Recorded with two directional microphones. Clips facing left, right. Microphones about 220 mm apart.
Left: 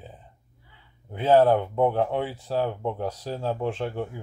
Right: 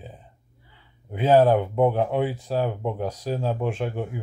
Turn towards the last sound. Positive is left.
turn(degrees=-15)  # may be behind; listen again after turning